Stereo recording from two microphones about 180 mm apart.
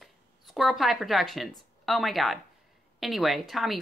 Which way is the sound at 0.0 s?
Centre (ahead or behind).